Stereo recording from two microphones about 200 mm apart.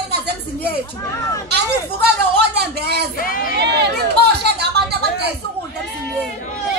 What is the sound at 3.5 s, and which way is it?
Chatter, 55° right (ahead or behind).